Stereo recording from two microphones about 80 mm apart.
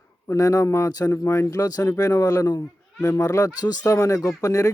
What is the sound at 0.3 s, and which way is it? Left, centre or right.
A man's voice, left.